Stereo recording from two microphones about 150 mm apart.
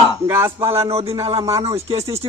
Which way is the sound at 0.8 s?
45° right (ahead or behind).